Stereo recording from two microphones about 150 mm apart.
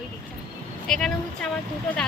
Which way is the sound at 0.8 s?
5° left (ahead or behind).